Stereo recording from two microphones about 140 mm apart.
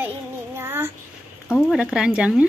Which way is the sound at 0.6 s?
15° right (ahead or behind).